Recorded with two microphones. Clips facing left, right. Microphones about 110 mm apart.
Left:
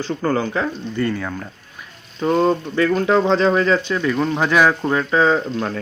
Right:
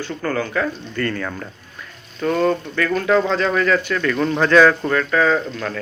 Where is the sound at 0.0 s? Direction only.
25° left (ahead or behind).